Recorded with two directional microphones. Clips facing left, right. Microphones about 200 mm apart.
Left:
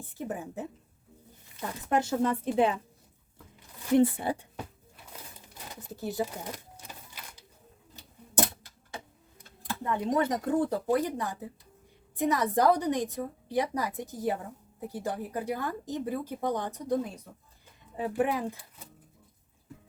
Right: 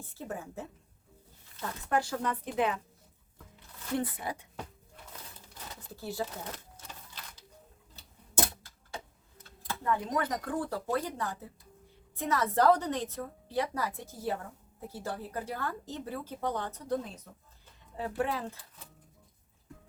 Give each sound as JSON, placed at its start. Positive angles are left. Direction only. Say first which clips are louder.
{"t": 0.1, "sound": "speech", "louder": "left 4 dB", "side_deg": 15}
{"t": 3.9, "sound": "speech", "louder": "left 10 dB", "side_deg": 30}
{"t": 5.6, "sound": "a sound", "louder": "left 4 dB", "side_deg": 20}
{"t": 9.4, "sound": "speech", "louder": "left 2 dB", "side_deg": 20}